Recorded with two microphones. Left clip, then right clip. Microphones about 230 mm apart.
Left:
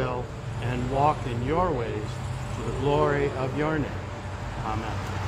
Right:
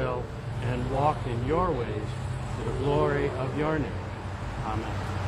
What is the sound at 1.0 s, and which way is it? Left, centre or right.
Speech, left.